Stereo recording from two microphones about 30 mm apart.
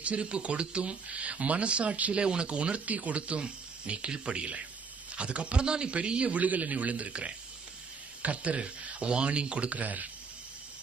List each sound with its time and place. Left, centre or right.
0.0 s speech: right
6.3 s a man's voice: right
7.1 s speech: right
8.2 s speech: right
9.7 s a man's voice: right